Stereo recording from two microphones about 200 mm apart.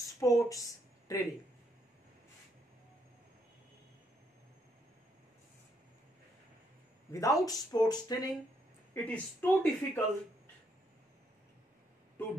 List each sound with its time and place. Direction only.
0.2 s speech: 15° left (ahead or behind)
7.1 s speech: 15° left (ahead or behind)
8.9 s speech: 10° left (ahead or behind)